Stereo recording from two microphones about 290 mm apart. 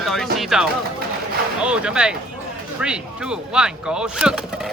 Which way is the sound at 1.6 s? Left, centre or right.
Centre.